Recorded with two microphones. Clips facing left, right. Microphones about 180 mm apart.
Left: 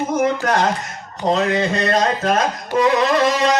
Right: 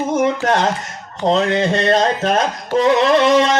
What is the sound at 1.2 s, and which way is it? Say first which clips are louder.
Speech: right 2 dB; 30° right (ahead or behind).